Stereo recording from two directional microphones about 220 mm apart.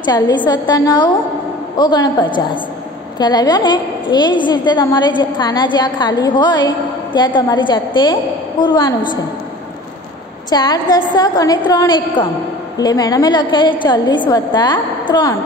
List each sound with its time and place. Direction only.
0.0 s a woman's voice: 20° left (ahead or behind)
10.5 s a woman's voice: 20° left (ahead or behind)